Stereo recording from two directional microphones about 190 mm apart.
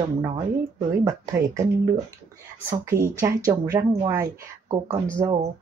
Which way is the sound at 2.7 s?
15° right (ahead or behind).